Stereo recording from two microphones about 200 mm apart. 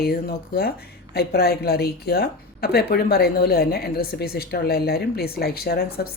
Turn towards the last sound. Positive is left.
turn(degrees=50)  # may be behind; listen again after turning